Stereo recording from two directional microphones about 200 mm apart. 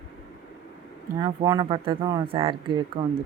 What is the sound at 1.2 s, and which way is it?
Speech, 20° right (ahead or behind).